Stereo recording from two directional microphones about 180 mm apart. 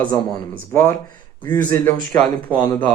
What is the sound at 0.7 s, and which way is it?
Speech, 15° left (ahead or behind).